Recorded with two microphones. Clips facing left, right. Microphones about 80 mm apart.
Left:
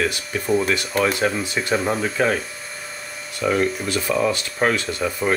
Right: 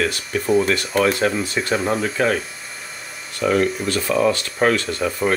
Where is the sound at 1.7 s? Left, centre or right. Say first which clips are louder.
Even; centre.